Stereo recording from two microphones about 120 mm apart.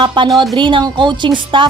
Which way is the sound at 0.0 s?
40° right (ahead or behind).